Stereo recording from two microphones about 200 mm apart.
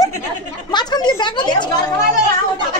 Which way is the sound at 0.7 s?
20° left (ahead or behind).